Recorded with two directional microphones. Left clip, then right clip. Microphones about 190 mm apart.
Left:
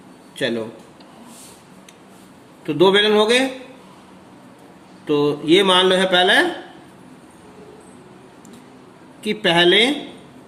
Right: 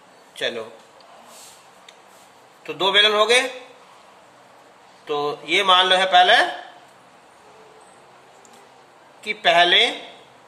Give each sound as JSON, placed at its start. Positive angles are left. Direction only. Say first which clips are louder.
{"t": 0.3, "sound": "a man's voice", "louder": "left 3 dB", "side_deg": 10}
{"t": 2.6, "sound": "speech", "louder": "left 2 dB", "side_deg": 15}
{"t": 5.0, "sound": "speech", "louder": "left 6 dB", "side_deg": 15}
{"t": 9.2, "sound": "speech", "louder": "even", "side_deg": 15}